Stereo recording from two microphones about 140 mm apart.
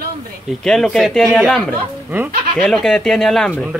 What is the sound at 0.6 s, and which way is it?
Speech, 5° left (ahead or behind).